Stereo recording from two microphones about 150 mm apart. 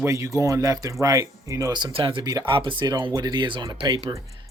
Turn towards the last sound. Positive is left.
turn(degrees=-30)  # may be behind; listen again after turning